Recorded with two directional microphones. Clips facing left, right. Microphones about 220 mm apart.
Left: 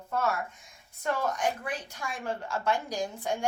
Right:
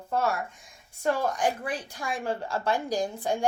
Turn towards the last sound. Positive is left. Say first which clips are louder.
# right 4 dB
turn(degrees=-35)  # may be behind; listen again after turning